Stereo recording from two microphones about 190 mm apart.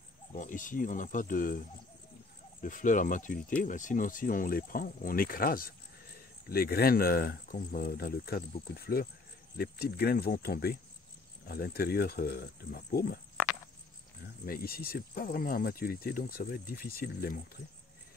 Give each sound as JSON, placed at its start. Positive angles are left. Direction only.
{"t": 0.3, "sound": "speech", "side_deg": 45}
{"t": 2.6, "sound": "speech", "side_deg": 45}
{"t": 14.4, "sound": "speech", "side_deg": 50}